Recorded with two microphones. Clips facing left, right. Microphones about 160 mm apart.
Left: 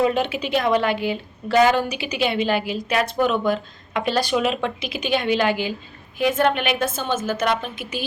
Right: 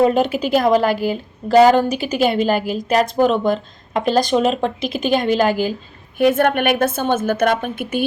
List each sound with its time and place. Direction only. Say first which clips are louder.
0.0 s a woman's voice: right 5 dB; 40° right (ahead or behind)
6.1 s a woman's voice: right 5 dB; 55° right (ahead or behind)